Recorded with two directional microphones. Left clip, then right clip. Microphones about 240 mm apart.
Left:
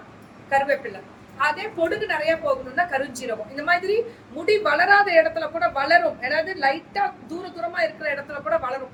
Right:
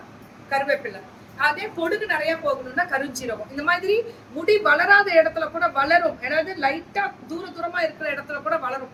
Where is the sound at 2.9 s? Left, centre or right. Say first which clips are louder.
Even; centre.